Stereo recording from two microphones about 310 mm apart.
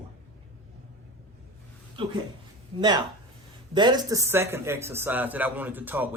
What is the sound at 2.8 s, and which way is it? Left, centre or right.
Speech, centre.